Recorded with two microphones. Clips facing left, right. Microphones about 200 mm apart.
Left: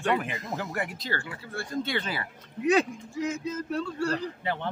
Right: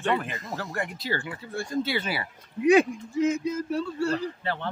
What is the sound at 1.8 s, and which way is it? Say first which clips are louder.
Speech: right 2 dB; 5° right (ahead or behind).